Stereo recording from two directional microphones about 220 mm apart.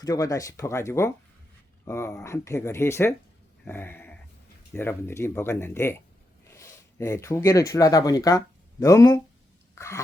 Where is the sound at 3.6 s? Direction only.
10° left (ahead or behind).